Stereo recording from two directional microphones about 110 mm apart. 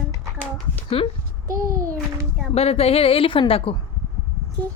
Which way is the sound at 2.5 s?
65° left (ahead or behind).